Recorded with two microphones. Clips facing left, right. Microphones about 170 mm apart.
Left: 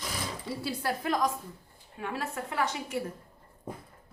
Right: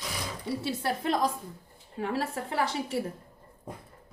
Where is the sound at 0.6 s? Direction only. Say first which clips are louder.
Right 1 dB; 25° right (ahead or behind).